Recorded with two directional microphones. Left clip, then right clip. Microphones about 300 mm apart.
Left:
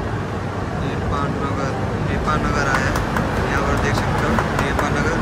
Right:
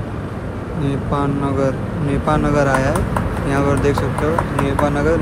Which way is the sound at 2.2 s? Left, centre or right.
Centre.